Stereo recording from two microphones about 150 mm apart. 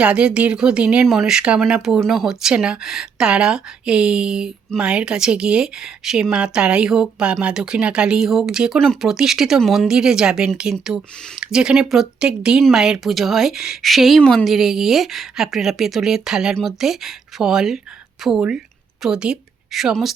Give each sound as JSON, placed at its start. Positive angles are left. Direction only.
{"t": 0.0, "sound": "a woman's voice", "side_deg": -5}